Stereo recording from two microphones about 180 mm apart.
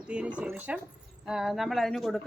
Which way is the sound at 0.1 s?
5° right (ahead or behind).